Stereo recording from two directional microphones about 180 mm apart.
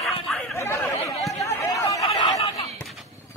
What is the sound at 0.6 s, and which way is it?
Chatter, 15° left (ahead or behind).